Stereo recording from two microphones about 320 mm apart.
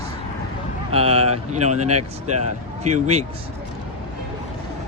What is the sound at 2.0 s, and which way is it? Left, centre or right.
Speech, right.